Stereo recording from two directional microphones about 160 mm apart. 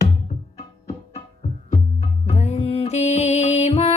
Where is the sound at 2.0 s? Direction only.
45° left (ahead or behind).